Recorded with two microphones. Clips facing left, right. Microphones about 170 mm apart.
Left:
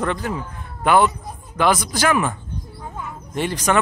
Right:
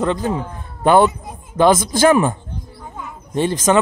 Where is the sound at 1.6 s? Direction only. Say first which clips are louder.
Right 6 dB; 25° right (ahead or behind).